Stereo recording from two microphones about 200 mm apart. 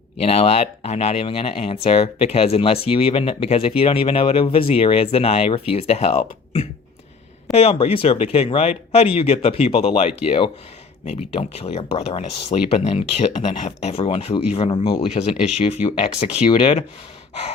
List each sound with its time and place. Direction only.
0.2 s speech: 30° left (ahead or behind)